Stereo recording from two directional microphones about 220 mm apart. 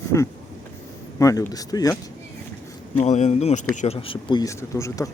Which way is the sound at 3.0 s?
30° left (ahead or behind).